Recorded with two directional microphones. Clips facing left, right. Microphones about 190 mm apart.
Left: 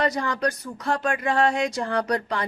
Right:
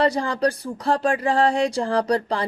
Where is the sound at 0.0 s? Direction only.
30° right (ahead or behind).